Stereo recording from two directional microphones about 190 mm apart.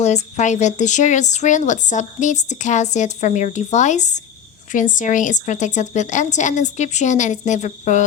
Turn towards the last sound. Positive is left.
turn(degrees=40)  # may be behind; listen again after turning